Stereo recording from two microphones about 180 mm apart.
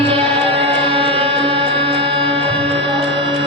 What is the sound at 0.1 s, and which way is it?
Music, 30° right (ahead or behind).